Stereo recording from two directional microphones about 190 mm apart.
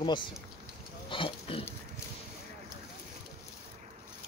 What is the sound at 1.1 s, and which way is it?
Pig, 30° left (ahead or behind).